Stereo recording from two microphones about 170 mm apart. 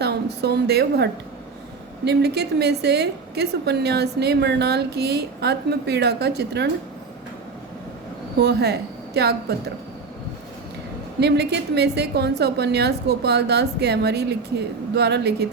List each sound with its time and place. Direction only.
0.0 s a woman's voice: 70° right (ahead or behind)
8.4 s a woman's voice: 75° right (ahead or behind)
11.2 s a woman's voice: 75° right (ahead or behind)